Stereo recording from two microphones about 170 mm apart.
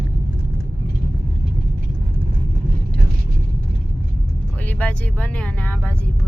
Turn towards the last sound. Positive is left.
turn(degrees=10)  # may be behind; listen again after turning